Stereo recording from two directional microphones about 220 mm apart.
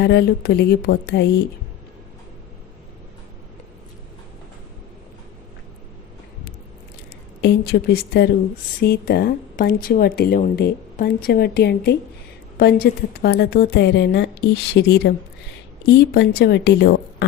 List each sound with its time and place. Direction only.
0.0 s speech: 50° left (ahead or behind)
7.4 s speech: 45° left (ahead or behind)